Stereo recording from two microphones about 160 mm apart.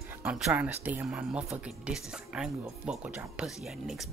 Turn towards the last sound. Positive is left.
turn(degrees=0)  # may be behind; listen again after turning